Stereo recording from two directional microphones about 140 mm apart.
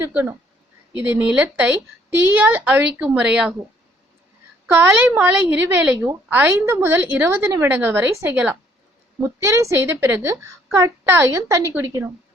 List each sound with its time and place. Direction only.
0.1 s a woman's voice: 10° right (ahead or behind)
4.6 s a woman's voice: 15° right (ahead or behind)